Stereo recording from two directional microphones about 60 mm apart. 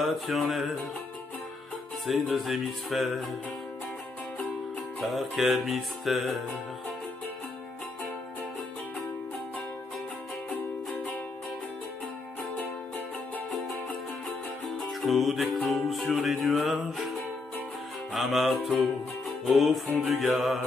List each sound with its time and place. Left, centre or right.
0.0 s music: centre
2.0 s music: centre
5.0 s music: centre
14.9 s music: centre
18.1 s music: centre